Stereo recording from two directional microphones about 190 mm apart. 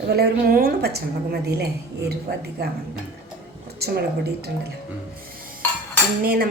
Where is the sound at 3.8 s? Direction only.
55° right (ahead or behind).